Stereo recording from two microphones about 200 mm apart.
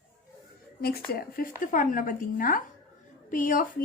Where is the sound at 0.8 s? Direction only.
50° left (ahead or behind).